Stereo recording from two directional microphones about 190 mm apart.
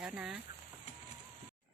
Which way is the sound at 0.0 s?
Centre (ahead or behind).